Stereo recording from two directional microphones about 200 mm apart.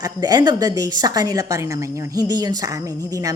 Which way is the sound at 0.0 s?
20° right (ahead or behind).